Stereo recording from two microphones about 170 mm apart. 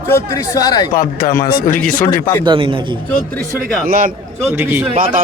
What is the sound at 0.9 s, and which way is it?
A man's voice, 55° left (ahead or behind).